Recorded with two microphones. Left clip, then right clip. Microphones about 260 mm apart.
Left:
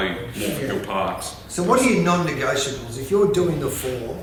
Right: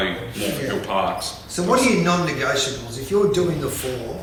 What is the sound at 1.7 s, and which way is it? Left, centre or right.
A man's voice, left.